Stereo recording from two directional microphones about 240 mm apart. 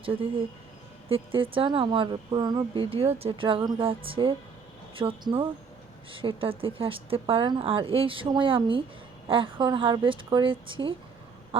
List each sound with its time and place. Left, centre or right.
0.0 s speech: right